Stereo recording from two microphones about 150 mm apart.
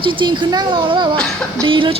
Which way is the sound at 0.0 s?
35° right (ahead or behind).